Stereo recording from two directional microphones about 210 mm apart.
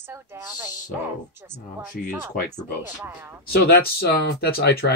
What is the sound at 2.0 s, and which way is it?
Speech, 40° left (ahead or behind).